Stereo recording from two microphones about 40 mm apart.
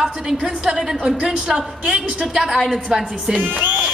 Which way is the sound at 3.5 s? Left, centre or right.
Right.